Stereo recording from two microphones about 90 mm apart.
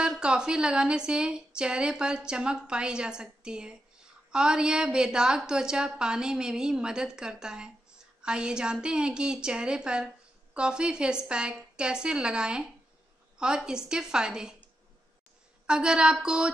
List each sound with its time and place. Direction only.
0.0 s a woman's voice: 10° right (ahead or behind)
15.6 s a woman's voice: 10° right (ahead or behind)